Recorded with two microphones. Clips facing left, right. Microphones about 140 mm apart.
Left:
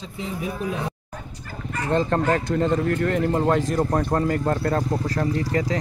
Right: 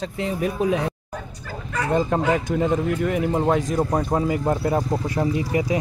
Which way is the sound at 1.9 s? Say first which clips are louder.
Even; 10° right (ahead or behind).